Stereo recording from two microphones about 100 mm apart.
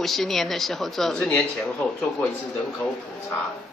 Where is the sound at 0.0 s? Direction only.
Centre (ahead or behind).